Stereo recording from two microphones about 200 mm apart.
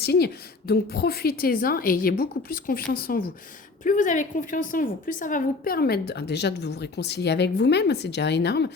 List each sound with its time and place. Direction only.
0.0 s a woman's voice: 55° left (ahead or behind)